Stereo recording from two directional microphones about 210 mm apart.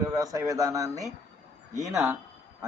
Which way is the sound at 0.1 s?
15° right (ahead or behind).